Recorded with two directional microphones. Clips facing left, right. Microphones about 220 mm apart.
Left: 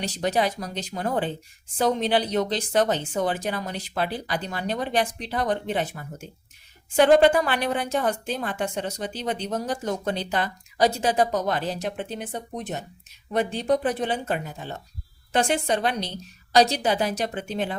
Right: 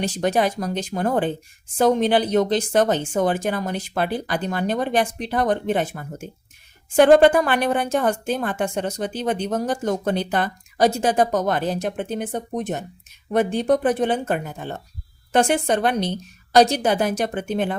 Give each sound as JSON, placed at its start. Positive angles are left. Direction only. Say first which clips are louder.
{"t": 0.0, "sound": "a woman's voice", "louder": "right 4 dB", "side_deg": -50}